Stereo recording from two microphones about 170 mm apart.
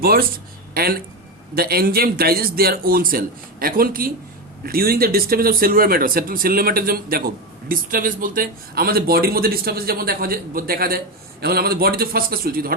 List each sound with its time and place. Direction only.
0.0 s a man's voice: 60° right (ahead or behind)